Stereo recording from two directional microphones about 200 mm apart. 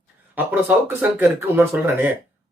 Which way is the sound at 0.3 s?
10° right (ahead or behind).